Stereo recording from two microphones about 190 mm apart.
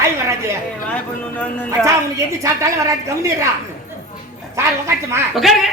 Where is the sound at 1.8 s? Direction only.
15° right (ahead or behind).